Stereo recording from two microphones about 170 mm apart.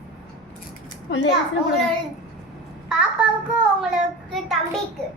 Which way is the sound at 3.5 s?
Centre (ahead or behind).